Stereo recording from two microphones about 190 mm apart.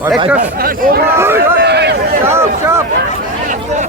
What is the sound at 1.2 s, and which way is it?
Speech, 10° right (ahead or behind).